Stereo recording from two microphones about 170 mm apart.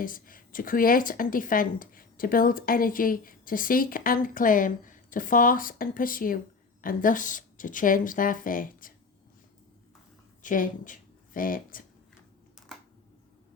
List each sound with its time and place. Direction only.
0.0 s speech: 55° left (ahead or behind)
10.4 s speech: 50° left (ahead or behind)
12.6 s a sound: 5° right (ahead or behind)